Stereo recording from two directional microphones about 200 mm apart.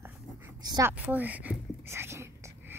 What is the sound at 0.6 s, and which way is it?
A woman's voice, 15° right (ahead or behind).